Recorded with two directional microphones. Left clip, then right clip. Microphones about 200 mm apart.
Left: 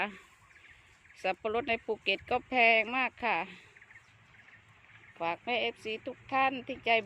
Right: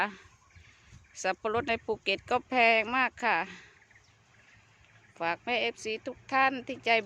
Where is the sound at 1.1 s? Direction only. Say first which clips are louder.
Right 2 dB; 5° right (ahead or behind).